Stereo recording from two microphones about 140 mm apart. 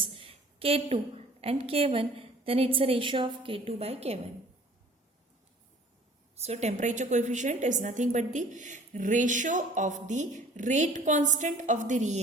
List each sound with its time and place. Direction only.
0.0 s a sound: 40° right (ahead or behind)
1.4 s a woman's voice: 45° right (ahead or behind)
6.4 s a woman's voice: 50° right (ahead or behind)